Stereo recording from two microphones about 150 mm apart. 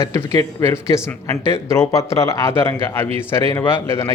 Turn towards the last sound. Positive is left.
turn(degrees=15)  # may be behind; listen again after turning